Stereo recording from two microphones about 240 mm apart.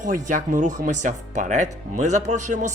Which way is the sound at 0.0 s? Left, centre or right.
Right.